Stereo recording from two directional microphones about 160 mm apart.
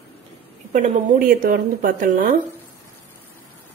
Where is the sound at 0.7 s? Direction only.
55° right (ahead or behind).